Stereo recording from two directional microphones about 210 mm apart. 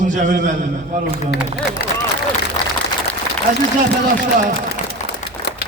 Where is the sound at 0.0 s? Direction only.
35° right (ahead or behind).